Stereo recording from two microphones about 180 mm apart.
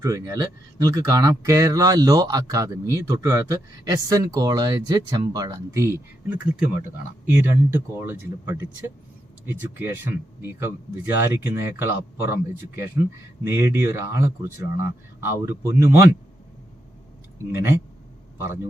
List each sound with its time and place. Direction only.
0.0 s speech: 20° right (ahead or behind)
17.5 s speech: 15° right (ahead or behind)